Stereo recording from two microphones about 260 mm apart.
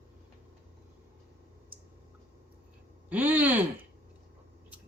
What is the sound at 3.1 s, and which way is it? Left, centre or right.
Speech, centre.